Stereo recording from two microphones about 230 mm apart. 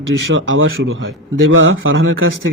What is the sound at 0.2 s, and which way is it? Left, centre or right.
Speech, right.